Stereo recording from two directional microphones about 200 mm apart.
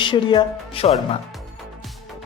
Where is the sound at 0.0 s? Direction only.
25° left (ahead or behind).